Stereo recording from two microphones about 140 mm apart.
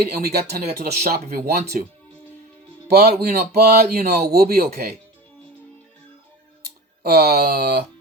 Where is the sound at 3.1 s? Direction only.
90° right.